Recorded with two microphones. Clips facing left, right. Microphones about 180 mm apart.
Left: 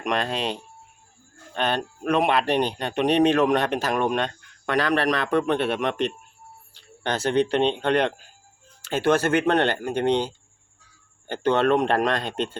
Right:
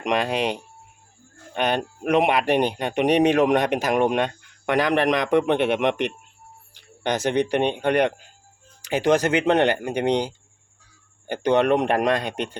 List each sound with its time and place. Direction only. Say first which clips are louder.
0.0 s speech: right 3 dB; 15° right (ahead or behind)